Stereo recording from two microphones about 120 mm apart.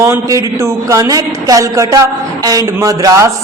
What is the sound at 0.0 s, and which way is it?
Speech, 25° right (ahead or behind).